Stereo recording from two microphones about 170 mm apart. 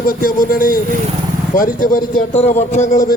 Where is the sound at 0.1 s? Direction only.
55° left (ahead or behind).